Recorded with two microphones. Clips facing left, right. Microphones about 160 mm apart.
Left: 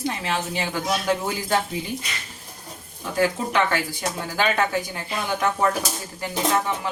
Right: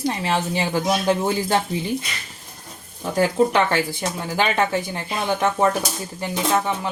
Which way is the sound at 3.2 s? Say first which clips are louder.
Right 4 dB; 30° right (ahead or behind).